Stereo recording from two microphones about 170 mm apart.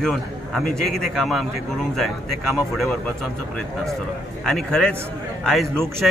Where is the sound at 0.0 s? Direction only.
Centre (ahead or behind).